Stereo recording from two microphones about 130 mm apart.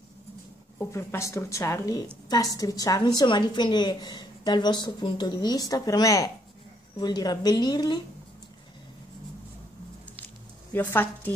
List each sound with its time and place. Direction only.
0.7 s a woman's voice: 20° left (ahead or behind)
10.7 s speech: 15° left (ahead or behind)